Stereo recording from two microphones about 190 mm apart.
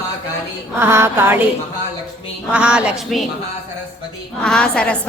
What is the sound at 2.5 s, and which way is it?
Speech, 5° right (ahead or behind).